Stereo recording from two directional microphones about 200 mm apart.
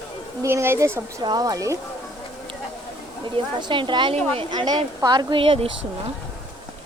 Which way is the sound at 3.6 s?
25° right (ahead or behind).